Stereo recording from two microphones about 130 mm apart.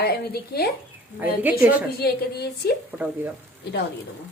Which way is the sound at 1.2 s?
15° right (ahead or behind).